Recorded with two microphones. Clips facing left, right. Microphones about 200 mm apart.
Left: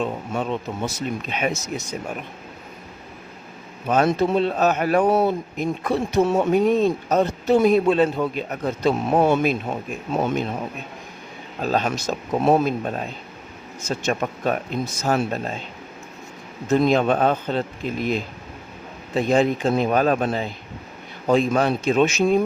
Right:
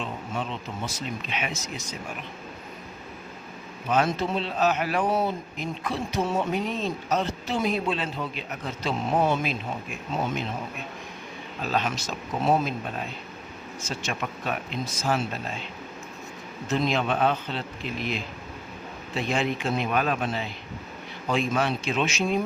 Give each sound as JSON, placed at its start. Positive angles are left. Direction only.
{"t": 0.0, "sound": "a man's voice", "side_deg": 50}
{"t": 3.8, "sound": "a man's voice", "side_deg": 45}
{"t": 11.6, "sound": "a man's voice", "side_deg": 45}
{"t": 12.5, "sound": "speech", "side_deg": 60}
{"t": 12.8, "sound": "a man's voice", "side_deg": 45}
{"t": 16.7, "sound": "a man's voice", "side_deg": 45}